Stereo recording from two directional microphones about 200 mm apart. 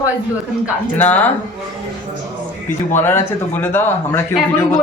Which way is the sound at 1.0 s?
10° left (ahead or behind).